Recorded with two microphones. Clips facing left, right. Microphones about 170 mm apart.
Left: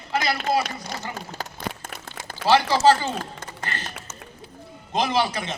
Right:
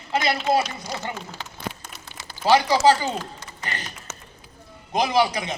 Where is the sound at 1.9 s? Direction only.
50° left (ahead or behind).